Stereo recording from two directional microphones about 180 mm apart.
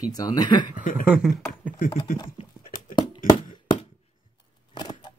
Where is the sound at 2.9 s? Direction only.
25° left (ahead or behind).